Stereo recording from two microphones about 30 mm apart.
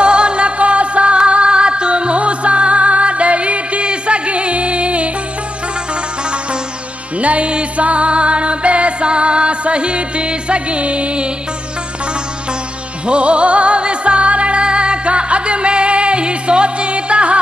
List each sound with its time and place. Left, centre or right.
0.0 s music: right
7.2 s music: right
13.0 s music: right